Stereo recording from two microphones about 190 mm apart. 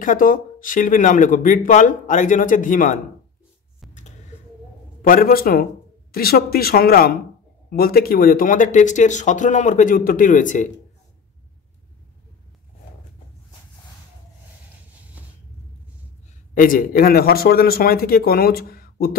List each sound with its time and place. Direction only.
0.0 s speech: 45° left (ahead or behind)
5.0 s speech: 50° left (ahead or behind)
16.5 s speech: 45° left (ahead or behind)